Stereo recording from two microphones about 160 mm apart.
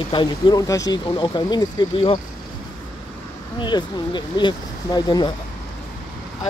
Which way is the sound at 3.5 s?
30° left (ahead or behind).